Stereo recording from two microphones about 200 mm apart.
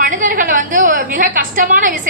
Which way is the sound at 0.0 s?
40° right (ahead or behind).